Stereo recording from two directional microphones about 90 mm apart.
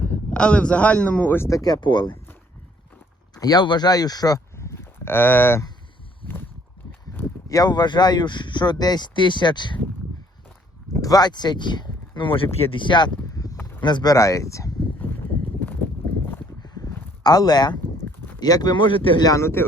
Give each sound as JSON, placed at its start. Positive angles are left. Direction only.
{"t": 0.0, "sound": "speech", "side_deg": 15}
{"t": 1.5, "sound": "speech", "side_deg": 40}
{"t": 1.8, "sound": "speech", "side_deg": 60}
{"t": 3.3, "sound": "speech", "side_deg": 45}
{"t": 4.5, "sound": "a sound", "side_deg": 30}
{"t": 7.4, "sound": "speech", "side_deg": 45}
{"t": 11.0, "sound": "speech", "side_deg": 45}
{"t": 13.3, "sound": "a sound", "side_deg": 40}
{"t": 13.6, "sound": "a sound", "side_deg": 25}
{"t": 13.8, "sound": "speech", "side_deg": 50}
{"t": 14.9, "sound": "a sound", "side_deg": 20}
{"t": 17.2, "sound": "speech", "side_deg": 50}
{"t": 19.2, "sound": "speech", "side_deg": 35}